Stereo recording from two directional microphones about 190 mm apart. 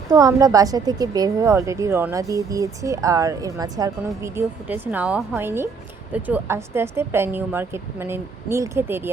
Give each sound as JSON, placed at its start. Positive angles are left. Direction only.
{"t": 0.1, "sound": "a woman's voice", "side_deg": -20}